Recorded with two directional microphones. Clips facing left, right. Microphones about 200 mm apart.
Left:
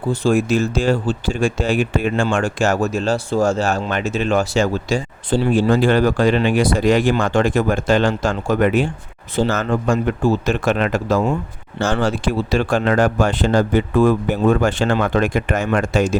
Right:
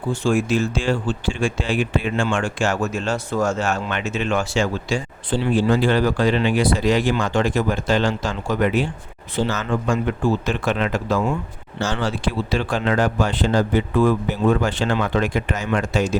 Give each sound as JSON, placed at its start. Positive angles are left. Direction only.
{"t": 0.1, "sound": "speech", "side_deg": 40}